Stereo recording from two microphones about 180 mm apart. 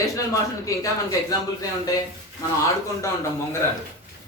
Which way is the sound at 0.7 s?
20° left (ahead or behind).